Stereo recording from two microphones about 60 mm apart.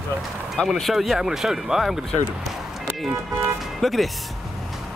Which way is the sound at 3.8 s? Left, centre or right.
Centre.